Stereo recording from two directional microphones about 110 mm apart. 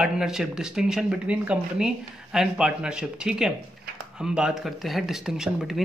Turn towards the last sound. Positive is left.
turn(degrees=-5)  # may be behind; listen again after turning